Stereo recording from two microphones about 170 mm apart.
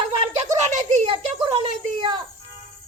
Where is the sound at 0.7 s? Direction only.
45° right (ahead or behind).